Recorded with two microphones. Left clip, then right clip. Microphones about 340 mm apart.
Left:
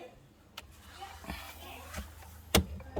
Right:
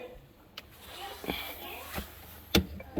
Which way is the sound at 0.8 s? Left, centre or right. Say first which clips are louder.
Right 6 dB; right.